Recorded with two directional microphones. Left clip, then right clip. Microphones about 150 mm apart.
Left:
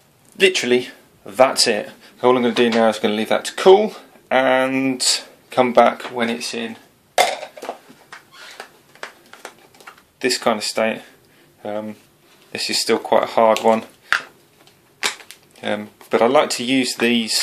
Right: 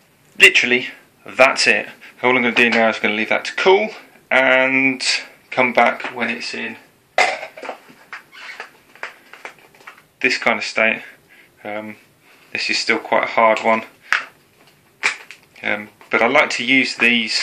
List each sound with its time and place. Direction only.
0.4 s speech: 40° left (ahead or behind)
1.3 s speech: 30° left (ahead or behind); by 6.4 s 75° left (ahead or behind)
10.1 s speech: 40° left (ahead or behind)
13.7 s a sound: 45° left (ahead or behind)
15.5 s a sound: 50° left (ahead or behind)
15.8 s speech: 45° left (ahead or behind)